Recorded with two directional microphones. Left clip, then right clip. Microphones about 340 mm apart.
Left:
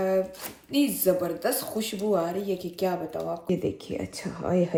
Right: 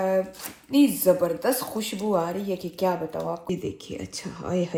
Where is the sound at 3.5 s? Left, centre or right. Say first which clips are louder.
Left 2 dB; centre.